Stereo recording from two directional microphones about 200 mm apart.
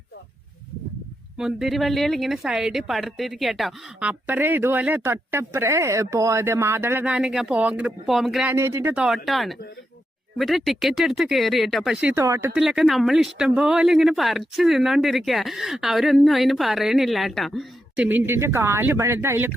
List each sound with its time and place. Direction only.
1.4 s speech: centre (ahead or behind)
8.5 s speech: 10° right (ahead or behind)
12.5 s speech: centre (ahead or behind)